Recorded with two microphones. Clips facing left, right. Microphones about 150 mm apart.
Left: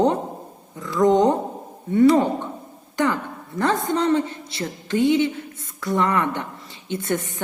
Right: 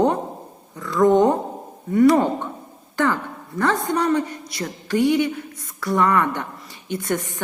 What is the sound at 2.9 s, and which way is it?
A woman's voice, 20° left (ahead or behind).